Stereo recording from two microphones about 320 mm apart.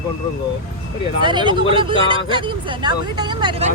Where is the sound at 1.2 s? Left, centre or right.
Centre.